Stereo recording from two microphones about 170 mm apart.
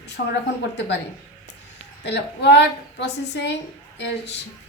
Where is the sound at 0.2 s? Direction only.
70° left (ahead or behind).